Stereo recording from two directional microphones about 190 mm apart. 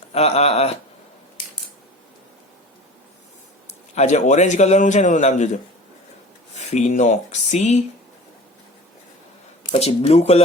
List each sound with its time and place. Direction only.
0.1 s a man's voice: 35° left (ahead or behind)
3.7 s a man's voice: 35° left (ahead or behind)
6.5 s a man's voice: 35° left (ahead or behind)
9.7 s a man's voice: 35° left (ahead or behind)